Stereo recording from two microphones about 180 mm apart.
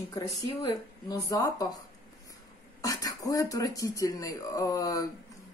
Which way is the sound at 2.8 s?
20° left (ahead or behind).